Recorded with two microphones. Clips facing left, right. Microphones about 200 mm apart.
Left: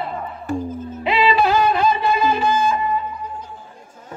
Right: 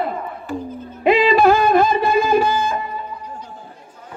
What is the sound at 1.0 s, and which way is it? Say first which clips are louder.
Music: right 5 dB; 50° right (ahead or behind).